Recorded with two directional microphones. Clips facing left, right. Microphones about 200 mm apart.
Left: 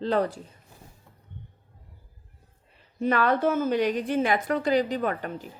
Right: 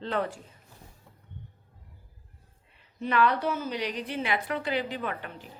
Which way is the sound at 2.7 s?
45° left (ahead or behind).